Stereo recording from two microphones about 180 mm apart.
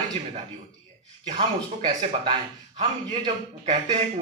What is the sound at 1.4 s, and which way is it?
Speech, 30° right (ahead or behind).